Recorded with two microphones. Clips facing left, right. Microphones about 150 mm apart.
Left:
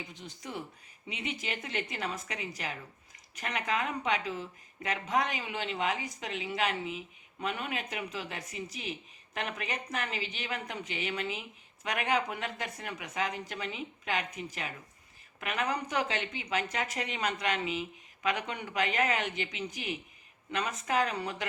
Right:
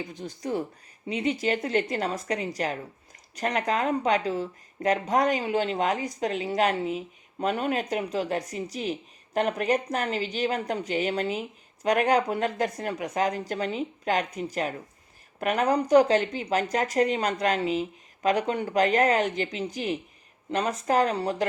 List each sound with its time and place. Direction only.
0.0 s speech: 40° right (ahead or behind)